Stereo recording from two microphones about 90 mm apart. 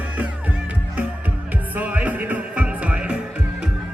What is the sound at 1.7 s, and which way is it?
Music, 15° right (ahead or behind).